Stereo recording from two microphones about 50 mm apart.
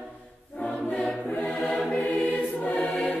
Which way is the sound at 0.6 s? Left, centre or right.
Left.